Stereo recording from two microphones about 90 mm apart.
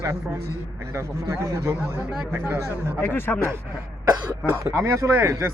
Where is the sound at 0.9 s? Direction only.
35° right (ahead or behind).